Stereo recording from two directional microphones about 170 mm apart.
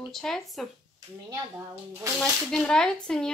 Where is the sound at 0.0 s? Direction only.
Centre (ahead or behind).